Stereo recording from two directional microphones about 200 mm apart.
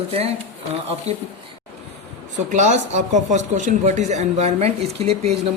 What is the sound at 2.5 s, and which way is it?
Speech, 40° right (ahead or behind).